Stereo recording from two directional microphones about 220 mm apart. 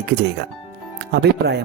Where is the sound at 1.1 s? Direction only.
50° right (ahead or behind).